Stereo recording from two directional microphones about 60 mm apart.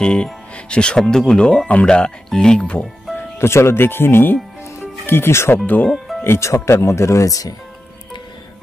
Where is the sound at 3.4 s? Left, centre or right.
Left.